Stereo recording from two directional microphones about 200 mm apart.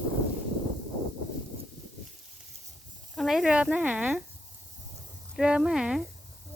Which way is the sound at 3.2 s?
Centre (ahead or behind).